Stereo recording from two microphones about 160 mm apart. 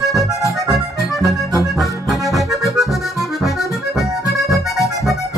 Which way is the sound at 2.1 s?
Centre (ahead or behind).